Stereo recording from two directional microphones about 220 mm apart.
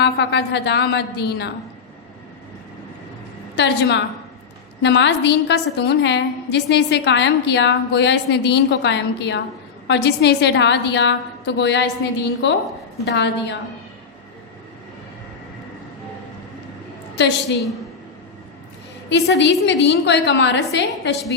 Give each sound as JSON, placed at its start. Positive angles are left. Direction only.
{"t": 0.0, "sound": "a woman's voice", "side_deg": 50}
{"t": 3.5, "sound": "a woman's voice", "side_deg": 50}
{"t": 19.0, "sound": "a woman's voice", "side_deg": 50}